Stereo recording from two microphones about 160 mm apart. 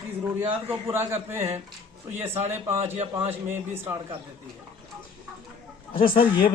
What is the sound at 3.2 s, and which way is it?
Speech, 15° right (ahead or behind).